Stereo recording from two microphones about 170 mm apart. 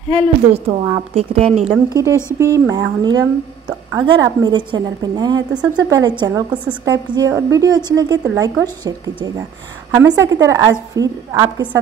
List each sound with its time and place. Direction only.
0.1 s speech: 35° right (ahead or behind)
1.7 s a woman's voice: 20° right (ahead or behind)